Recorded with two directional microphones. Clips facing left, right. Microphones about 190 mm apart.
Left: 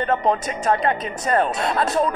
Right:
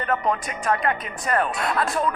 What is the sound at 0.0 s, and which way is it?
Speech, 25° left (ahead or behind).